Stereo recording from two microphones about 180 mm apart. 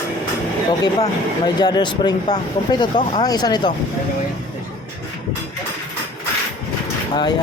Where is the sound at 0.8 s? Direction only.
25° left (ahead or behind).